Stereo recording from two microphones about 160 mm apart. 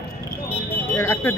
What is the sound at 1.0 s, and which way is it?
Speech, 15° left (ahead or behind).